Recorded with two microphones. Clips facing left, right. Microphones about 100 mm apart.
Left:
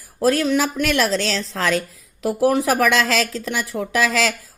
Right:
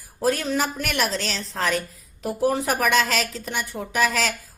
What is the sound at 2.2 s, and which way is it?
A woman's voice, 80° left.